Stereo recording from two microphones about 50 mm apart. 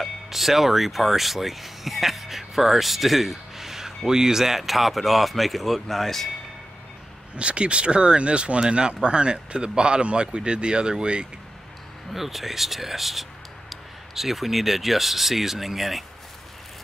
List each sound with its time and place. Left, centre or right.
0.0 s speech: centre
7.3 s speech: right
12.1 s speech: centre